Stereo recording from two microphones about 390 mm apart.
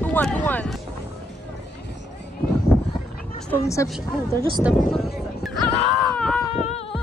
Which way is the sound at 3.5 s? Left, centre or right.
Centre.